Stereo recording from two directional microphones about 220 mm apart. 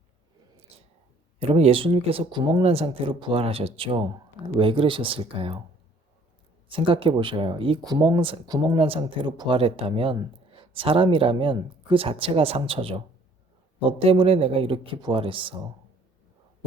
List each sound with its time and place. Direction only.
0.7 s a sound: 25° right (ahead or behind)
1.4 s speech: 25° right (ahead or behind)
6.7 s speech: 25° right (ahead or behind)